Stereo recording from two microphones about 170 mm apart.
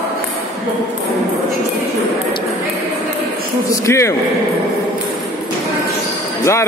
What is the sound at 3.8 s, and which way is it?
Speech, 15° left (ahead or behind).